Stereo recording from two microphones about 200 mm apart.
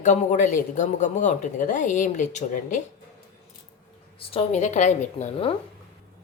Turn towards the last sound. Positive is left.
turn(degrees=30)  # may be behind; listen again after turning